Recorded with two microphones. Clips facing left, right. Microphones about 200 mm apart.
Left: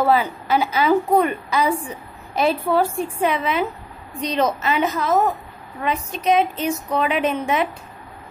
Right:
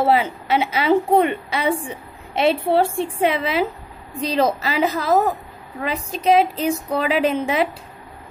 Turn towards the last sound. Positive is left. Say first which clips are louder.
# right 1 dB
turn(degrees=-30)  # may be behind; listen again after turning